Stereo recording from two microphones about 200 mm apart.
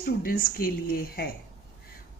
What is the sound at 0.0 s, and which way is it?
A woman's voice, 45° left (ahead or behind).